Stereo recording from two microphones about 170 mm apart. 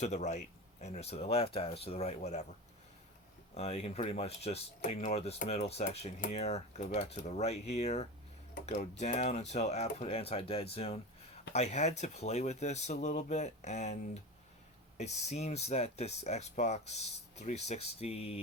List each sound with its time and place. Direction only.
0.0 s speech: 45° left (ahead or behind)
3.5 s speech: 40° left (ahead or behind)